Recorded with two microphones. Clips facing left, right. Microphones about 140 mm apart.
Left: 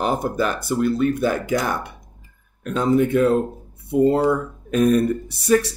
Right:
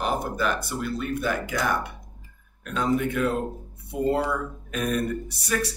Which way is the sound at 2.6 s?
30° left (ahead or behind).